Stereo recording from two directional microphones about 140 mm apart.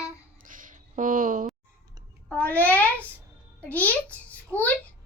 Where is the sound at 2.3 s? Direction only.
10° left (ahead or behind).